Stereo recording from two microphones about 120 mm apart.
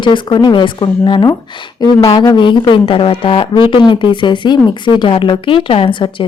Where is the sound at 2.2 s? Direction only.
40° left (ahead or behind).